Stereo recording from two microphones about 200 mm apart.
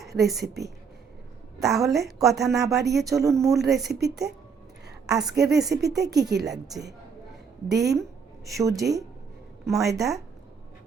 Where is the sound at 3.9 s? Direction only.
55° right (ahead or behind).